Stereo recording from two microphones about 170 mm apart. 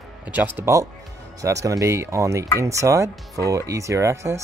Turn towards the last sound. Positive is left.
turn(degrees=-15)  # may be behind; listen again after turning